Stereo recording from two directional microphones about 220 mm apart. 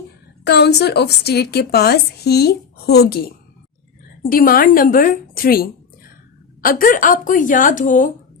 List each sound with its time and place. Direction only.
0.4 s a woman's voice: 50° left (ahead or behind)